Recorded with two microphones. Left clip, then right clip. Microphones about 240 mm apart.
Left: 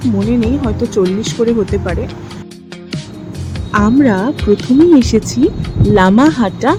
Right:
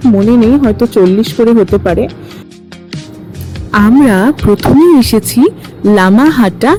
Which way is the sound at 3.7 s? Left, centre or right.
Right.